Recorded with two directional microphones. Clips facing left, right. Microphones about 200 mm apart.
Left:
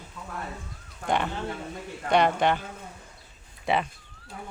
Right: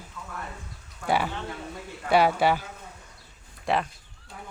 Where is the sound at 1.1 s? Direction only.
5° right (ahead or behind).